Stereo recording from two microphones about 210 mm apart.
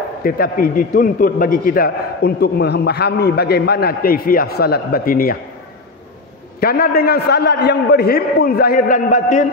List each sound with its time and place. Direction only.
0.2 s a man's voice: 45° left (ahead or behind)
6.6 s a man's voice: 45° left (ahead or behind)